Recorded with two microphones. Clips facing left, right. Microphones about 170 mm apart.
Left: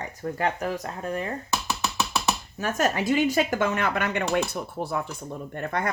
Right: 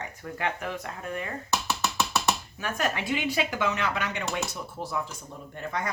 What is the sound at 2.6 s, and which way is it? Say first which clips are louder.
Speech: left 5 dB; 40° left (ahead or behind).